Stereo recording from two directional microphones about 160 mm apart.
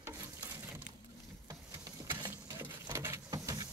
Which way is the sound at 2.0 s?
25° right (ahead or behind).